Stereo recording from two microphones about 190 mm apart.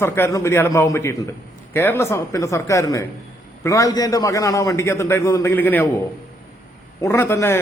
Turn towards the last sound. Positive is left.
turn(degrees=15)  # may be behind; listen again after turning